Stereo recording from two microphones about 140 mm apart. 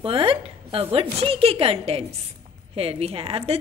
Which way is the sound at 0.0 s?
40° right (ahead or behind).